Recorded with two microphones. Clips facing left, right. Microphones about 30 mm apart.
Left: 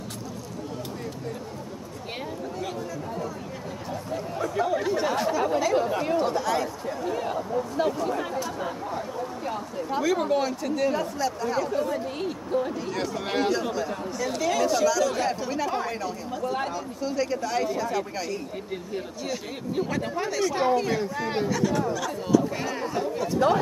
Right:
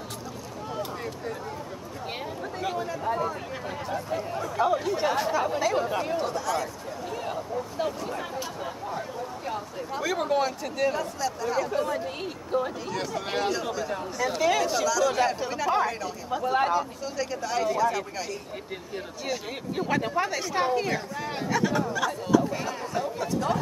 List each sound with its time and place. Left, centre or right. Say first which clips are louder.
3.1 s speech: right 9 dB; right
3.9 s speech: right 1 dB; centre
6.2 s speech: left 3 dB; centre
7.1 s speech: left 3 dB; centre
10.0 s speech: left 1 dB; centre
11.0 s speech: left 2 dB; centre
11.7 s speech: left 1 dB; centre
15.0 s speech: right 1 dB; centre
16.3 s speech: right 6 dB; centre
17.0 s speech: left 4 dB; centre
19.2 s speech: even; centre
21.0 s speech: left 5 dB; centre
21.5 s speech: right 3 dB; centre
22.9 s speech: left 1 dB; centre